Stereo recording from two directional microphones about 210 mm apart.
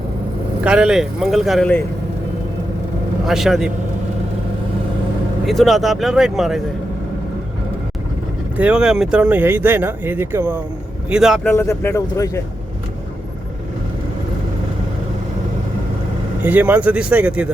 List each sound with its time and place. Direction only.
0.6 s speech: 5° right (ahead or behind)
3.2 s speech: centre (ahead or behind)
5.5 s speech: centre (ahead or behind)
8.5 s speech: 5° right (ahead or behind)
11.4 s speech: 10° left (ahead or behind)
16.4 s speech: 5° right (ahead or behind)